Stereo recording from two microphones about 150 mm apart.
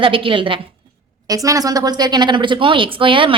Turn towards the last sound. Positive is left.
turn(degrees=-35)  # may be behind; listen again after turning